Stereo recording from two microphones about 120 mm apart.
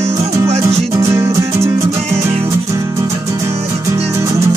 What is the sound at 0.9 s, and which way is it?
Music, 25° right (ahead or behind).